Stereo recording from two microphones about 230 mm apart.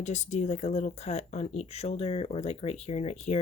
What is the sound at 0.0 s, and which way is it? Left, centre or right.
Speech, left.